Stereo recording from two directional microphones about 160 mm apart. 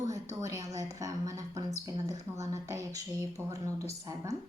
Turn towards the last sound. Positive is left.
turn(degrees=-20)  # may be behind; listen again after turning